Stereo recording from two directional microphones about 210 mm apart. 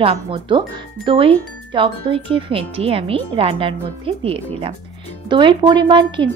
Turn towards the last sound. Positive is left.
turn(degrees=-20)  # may be behind; listen again after turning